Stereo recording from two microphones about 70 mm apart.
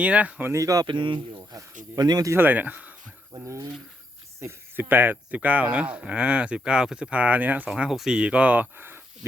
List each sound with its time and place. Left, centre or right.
0.0 s speech: centre
0.5 s speech: right
1.5 s speech: right
2.3 s speech: right
4.4 s cricket: right
4.9 s speech: right
7.9 s speech: centre
8.2 s speech: centre